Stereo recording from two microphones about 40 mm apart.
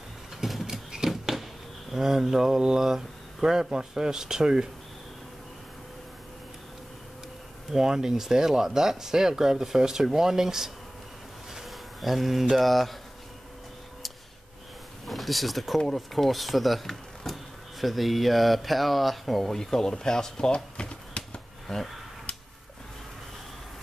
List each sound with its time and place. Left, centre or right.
0.4 s a sound: centre
0.7 s scissors: centre
1.9 s speech: centre
7.7 s speech: centre
11.5 s a sound: centre
12.5 s speech: centre
15.0 s speech: centre
20.5 s a sound: left
21.7 s speech: centre